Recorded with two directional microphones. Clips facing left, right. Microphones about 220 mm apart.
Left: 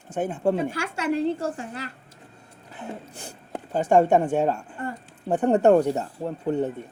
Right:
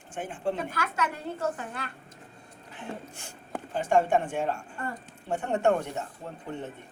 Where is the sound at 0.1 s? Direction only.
40° left (ahead or behind).